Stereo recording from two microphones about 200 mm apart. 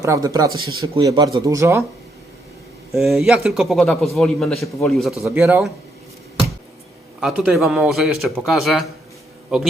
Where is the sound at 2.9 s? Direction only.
Centre (ahead or behind).